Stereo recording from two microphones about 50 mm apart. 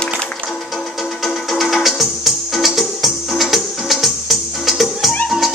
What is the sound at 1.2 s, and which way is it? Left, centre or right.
Music, centre.